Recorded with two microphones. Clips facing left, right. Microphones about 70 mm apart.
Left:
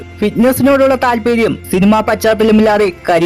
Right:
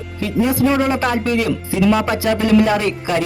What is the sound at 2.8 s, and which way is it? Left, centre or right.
Speech, left.